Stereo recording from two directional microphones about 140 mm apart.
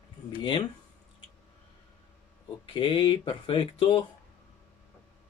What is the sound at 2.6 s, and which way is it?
Speech, 35° left (ahead or behind).